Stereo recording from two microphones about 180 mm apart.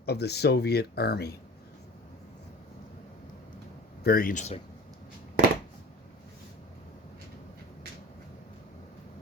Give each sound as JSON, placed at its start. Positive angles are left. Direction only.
{"t": 0.0, "sound": "speech", "side_deg": 65}
{"t": 4.0, "sound": "speech", "side_deg": 55}